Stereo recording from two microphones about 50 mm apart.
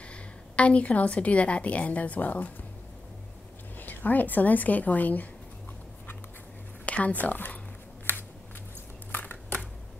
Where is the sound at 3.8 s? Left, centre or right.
Left.